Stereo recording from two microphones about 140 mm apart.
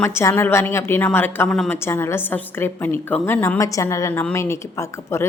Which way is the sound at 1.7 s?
15° left (ahead or behind).